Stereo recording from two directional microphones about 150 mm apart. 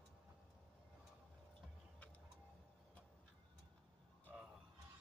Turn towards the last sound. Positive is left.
turn(degrees=-10)  # may be behind; listen again after turning